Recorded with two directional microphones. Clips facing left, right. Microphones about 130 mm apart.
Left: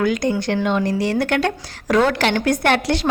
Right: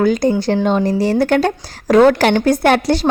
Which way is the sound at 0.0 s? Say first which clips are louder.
Right 5 dB; 35° right (ahead or behind).